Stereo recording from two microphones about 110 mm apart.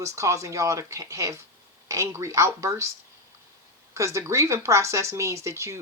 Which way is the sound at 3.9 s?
25° right (ahead or behind).